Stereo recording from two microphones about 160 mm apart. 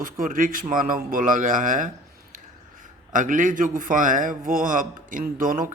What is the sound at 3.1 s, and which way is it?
Speech, 55° right (ahead or behind).